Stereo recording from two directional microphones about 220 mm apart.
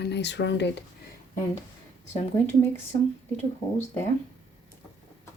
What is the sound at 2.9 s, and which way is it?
Speech, 20° left (ahead or behind).